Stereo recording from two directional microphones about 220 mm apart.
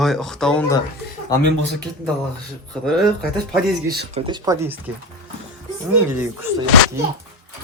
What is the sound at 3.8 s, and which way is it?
Speech, 45° right (ahead or behind).